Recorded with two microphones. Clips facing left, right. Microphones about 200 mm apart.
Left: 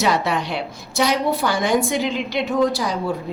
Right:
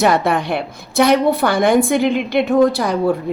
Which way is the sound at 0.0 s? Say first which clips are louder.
Right 5 dB; 55° right (ahead or behind).